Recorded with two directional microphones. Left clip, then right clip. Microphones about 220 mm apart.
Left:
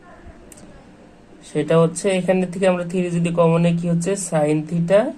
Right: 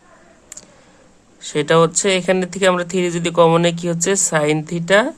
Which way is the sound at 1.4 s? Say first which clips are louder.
Right 3 dB; 30° right (ahead or behind).